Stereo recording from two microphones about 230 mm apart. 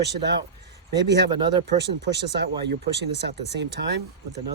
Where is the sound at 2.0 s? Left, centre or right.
Right.